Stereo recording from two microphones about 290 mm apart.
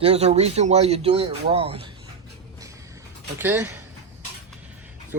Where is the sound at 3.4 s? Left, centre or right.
Centre.